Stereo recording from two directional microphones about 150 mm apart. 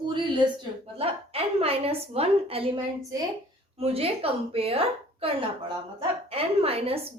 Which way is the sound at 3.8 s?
40° right (ahead or behind).